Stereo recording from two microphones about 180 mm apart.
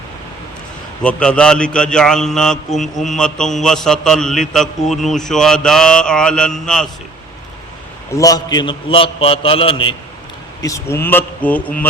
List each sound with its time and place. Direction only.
1.0 s a man's voice: 5° left (ahead or behind)
8.1 s a man's voice: 20° left (ahead or behind)
10.6 s a man's voice: 15° left (ahead or behind)